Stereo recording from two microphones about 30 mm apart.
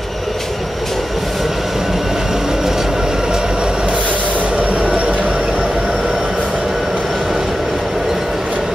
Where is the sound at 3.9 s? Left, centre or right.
Right.